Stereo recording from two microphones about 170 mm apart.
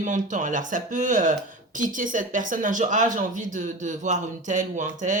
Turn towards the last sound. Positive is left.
turn(degrees=-45)  # may be behind; listen again after turning